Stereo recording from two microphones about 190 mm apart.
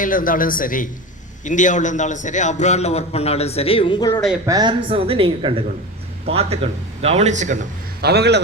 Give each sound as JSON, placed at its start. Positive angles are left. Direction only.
{"t": 0.0, "sound": "a man's voice", "side_deg": 45}
{"t": 4.4, "sound": "speech", "side_deg": -20}
{"t": 8.0, "sound": "a man's voice", "side_deg": -60}